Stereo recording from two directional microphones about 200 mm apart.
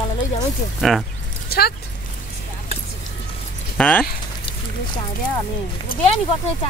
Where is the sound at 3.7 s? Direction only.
10° left (ahead or behind).